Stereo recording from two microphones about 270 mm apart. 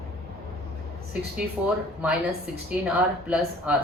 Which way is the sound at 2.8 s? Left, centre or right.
Centre.